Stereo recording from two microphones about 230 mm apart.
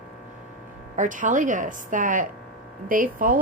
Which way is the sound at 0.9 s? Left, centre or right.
Right.